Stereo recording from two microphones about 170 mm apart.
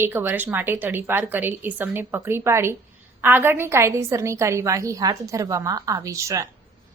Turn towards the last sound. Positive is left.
turn(degrees=-20)  # may be behind; listen again after turning